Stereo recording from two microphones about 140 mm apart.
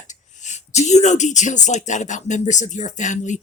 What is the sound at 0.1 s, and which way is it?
Speech, 60° left (ahead or behind).